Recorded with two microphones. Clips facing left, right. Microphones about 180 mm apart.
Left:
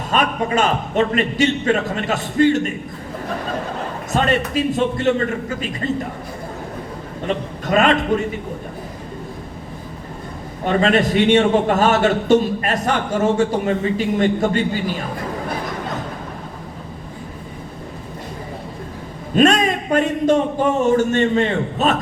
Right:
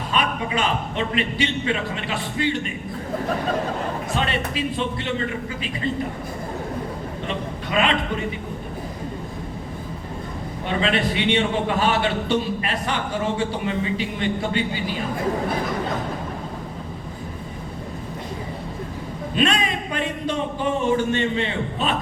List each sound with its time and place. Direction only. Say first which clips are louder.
0.1 s a man's voice: left 5 dB; 45° left (ahead or behind)
4.1 s a man's voice: left 9 dB; 45° left (ahead or behind)
7.3 s a man's voice: left 9 dB; 45° left (ahead or behind)
10.7 s a man's voice: left 6 dB; 45° left (ahead or behind)
19.4 s a man's voice: left 7 dB; 45° left (ahead or behind)